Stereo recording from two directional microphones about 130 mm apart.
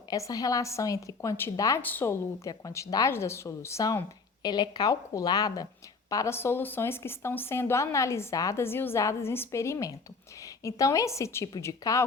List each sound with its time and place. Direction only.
0.1 s a woman's voice: 30° left (ahead or behind)
1.8 s a woman's voice: 15° left (ahead or behind)